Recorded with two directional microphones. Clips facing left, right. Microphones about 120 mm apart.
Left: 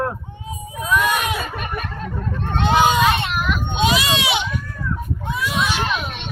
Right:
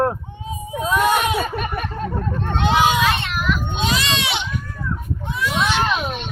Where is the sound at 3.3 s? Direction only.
15° left (ahead or behind).